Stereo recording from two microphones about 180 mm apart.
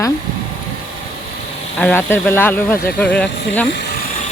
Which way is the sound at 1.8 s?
10° left (ahead or behind).